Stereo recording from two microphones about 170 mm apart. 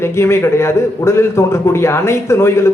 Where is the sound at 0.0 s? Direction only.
15° left (ahead or behind).